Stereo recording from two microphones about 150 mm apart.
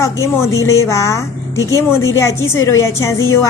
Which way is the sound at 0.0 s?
20° left (ahead or behind).